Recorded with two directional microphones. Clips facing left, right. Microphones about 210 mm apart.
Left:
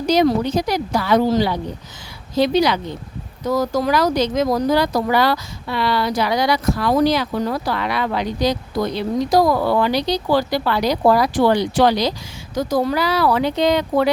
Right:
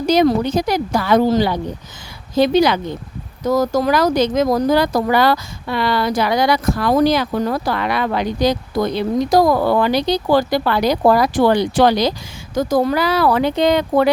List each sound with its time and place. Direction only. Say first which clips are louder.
0.1 s speech: right 2 dB; 50° right (ahead or behind)